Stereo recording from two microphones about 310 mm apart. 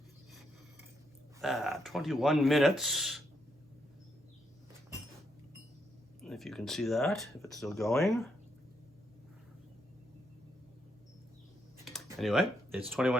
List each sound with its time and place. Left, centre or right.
1.4 s speech: centre
6.2 s speech: centre
11.9 s a sound: centre
12.9 s speech: centre